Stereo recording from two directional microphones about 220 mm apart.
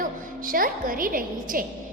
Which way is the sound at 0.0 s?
40° right (ahead or behind).